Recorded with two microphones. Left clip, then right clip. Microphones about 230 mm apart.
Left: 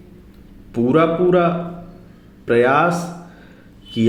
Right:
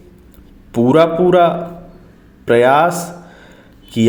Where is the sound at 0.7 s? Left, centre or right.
Right.